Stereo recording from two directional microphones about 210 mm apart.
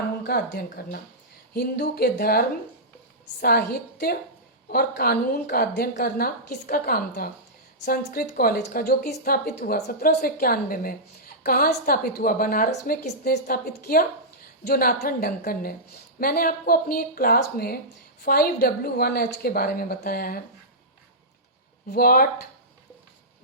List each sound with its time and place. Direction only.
0.3 s a woman's voice: 45° left (ahead or behind)
21.9 s a woman's voice: 45° left (ahead or behind)